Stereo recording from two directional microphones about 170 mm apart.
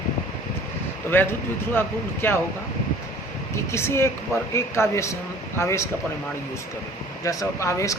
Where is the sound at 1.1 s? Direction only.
10° left (ahead or behind).